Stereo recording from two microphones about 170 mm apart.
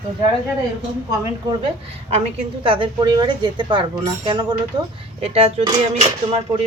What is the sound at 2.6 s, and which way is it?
A woman's voice, 30° right (ahead or behind).